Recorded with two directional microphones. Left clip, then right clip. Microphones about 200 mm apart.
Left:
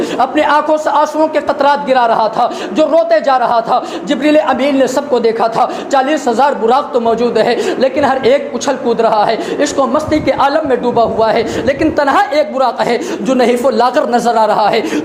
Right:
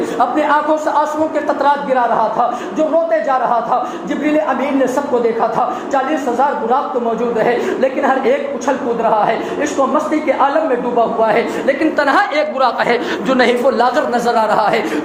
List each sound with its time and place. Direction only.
0.2 s a woman's voice: 45° left (ahead or behind)
7.2 s a woman's voice: 45° left (ahead or behind)